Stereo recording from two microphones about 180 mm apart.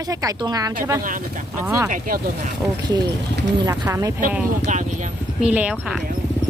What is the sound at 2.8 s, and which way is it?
Speech, 25° right (ahead or behind).